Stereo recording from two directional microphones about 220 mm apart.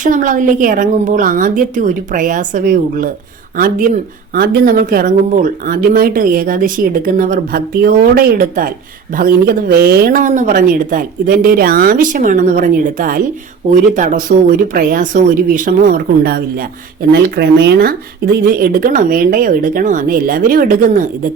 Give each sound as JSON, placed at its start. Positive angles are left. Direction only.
{"t": 0.0, "sound": "speech", "side_deg": -35}
{"t": 4.4, "sound": "speech", "side_deg": -45}